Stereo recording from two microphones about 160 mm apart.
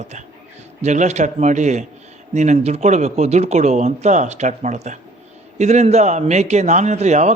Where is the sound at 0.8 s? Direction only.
45° right (ahead or behind).